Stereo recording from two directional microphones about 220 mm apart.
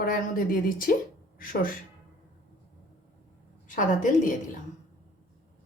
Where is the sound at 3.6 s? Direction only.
35° left (ahead or behind).